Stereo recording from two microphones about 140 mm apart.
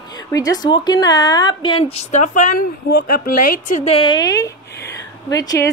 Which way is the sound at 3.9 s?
30° left (ahead or behind).